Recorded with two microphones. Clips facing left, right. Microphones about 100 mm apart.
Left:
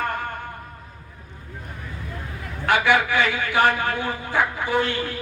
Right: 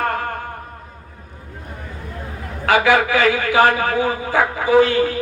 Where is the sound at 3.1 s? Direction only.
90° right.